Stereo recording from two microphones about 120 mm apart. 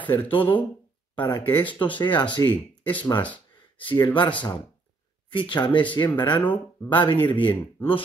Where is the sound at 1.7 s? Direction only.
45° left (ahead or behind).